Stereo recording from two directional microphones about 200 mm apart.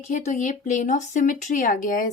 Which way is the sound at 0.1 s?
40° left (ahead or behind).